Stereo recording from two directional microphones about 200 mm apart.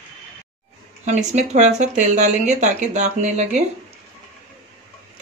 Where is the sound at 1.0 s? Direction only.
35° right (ahead or behind).